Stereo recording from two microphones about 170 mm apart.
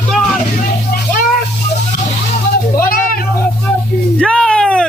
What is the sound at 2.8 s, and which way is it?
Children playing, 60° left (ahead or behind).